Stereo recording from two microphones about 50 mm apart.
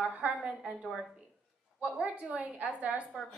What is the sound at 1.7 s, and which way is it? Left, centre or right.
A woman's voice, right.